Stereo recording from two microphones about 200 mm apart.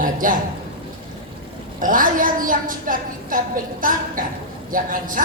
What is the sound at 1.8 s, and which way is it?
A woman's voice, 45° right (ahead or behind).